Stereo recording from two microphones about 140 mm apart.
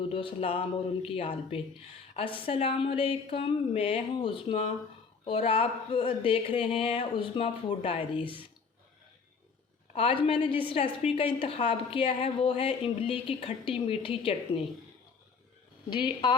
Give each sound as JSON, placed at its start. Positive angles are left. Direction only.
{"t": 0.1, "sound": "a woman's voice", "side_deg": 40}
{"t": 9.9, "sound": "a woman's voice", "side_deg": 45}
{"t": 15.9, "sound": "a woman's voice", "side_deg": 35}